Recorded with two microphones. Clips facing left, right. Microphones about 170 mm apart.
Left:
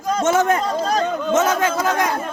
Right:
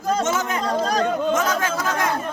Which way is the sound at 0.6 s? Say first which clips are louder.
Left 1 dB; 25° left (ahead or behind).